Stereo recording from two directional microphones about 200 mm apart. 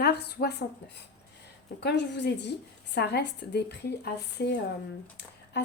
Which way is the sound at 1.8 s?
60° left (ahead or behind).